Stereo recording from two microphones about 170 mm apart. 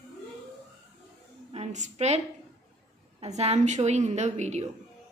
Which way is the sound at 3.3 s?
40° right (ahead or behind).